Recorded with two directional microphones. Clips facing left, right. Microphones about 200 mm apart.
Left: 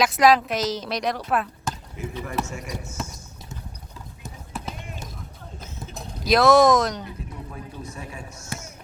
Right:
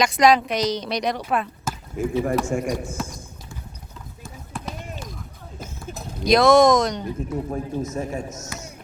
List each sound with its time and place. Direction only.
0.0 s a woman's voice: 5° left (ahead or behind)
2.0 s a man's voice: 50° right (ahead or behind)
4.5 s basketball bounce: 5° left (ahead or behind)
5.9 s speech: centre (ahead or behind)
7.3 s a man's voice: 45° right (ahead or behind)